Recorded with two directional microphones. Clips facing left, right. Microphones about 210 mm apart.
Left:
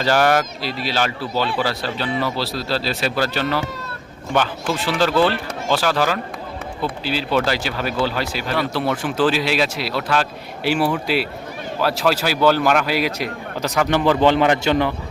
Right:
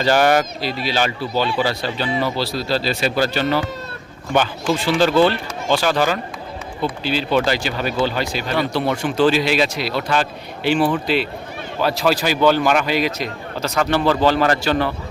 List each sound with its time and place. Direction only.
0.0 s speech: centre (ahead or behind)
4.7 s a man's voice: centre (ahead or behind); by 14.9 s 15° left (ahead or behind)